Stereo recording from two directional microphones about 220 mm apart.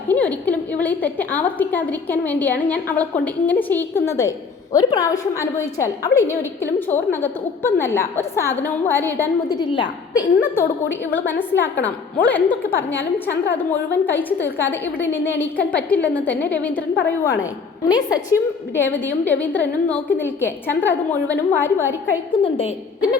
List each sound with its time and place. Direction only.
0.1 s a woman's voice: 5° left (ahead or behind)
17.8 s a woman's voice: 20° left (ahead or behind)
22.3 s a woman's voice: 25° left (ahead or behind)